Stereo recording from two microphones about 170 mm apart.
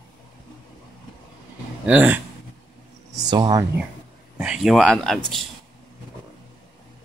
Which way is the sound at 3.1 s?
25° right (ahead or behind).